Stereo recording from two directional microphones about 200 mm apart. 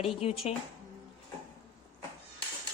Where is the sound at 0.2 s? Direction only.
30° left (ahead or behind).